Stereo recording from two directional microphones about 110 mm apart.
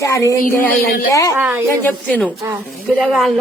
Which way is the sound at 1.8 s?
15° left (ahead or behind).